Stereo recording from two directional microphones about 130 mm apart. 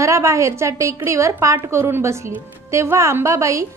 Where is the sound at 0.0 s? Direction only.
25° right (ahead or behind).